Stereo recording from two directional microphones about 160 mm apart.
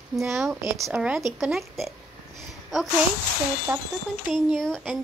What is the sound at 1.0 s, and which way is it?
Speech, 5° right (ahead or behind).